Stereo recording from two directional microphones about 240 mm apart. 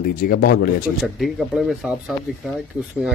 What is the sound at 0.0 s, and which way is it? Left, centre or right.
Speech, left.